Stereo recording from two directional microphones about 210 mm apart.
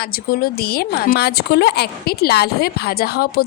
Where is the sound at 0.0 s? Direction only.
45° left (ahead or behind).